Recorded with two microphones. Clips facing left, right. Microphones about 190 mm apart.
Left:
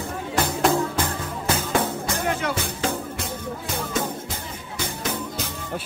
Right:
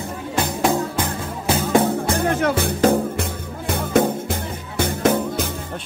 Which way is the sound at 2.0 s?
55° right (ahead or behind).